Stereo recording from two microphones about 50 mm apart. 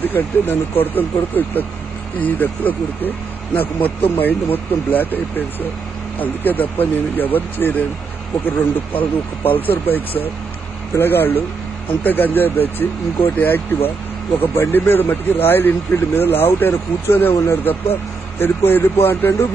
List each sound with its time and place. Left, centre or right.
0.0 s speech: left